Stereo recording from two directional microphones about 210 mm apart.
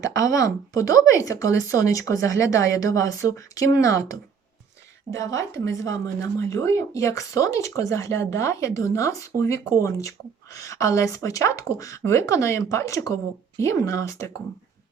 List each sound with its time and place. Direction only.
0.0 s speech: 15° left (ahead or behind)